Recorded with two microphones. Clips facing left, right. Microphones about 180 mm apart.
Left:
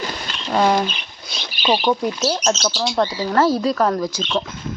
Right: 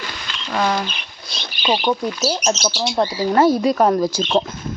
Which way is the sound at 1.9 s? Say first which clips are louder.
Left 1 dB; centre (ahead or behind).